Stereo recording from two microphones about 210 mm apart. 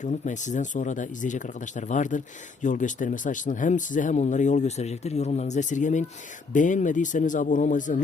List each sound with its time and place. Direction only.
0.0 s speech: 35° left (ahead or behind)